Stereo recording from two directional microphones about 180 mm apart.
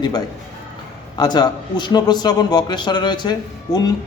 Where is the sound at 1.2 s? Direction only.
25° left (ahead or behind).